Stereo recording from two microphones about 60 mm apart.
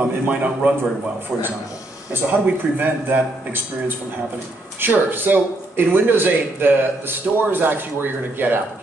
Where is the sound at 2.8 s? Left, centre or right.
Right.